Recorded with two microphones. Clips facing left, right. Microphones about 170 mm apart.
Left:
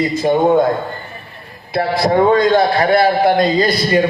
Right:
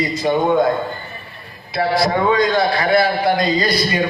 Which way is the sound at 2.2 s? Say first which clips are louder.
Left 4 dB; 45° left (ahead or behind).